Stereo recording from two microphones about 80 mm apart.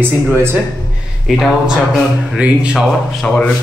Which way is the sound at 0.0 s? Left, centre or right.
Right.